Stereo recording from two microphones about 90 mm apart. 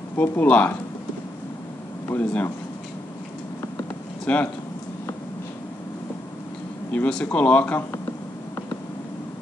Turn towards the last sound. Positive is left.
turn(degrees=20)  # may be behind; listen again after turning